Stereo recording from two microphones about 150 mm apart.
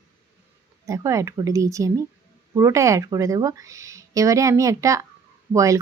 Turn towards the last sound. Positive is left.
turn(degrees=-20)  # may be behind; listen again after turning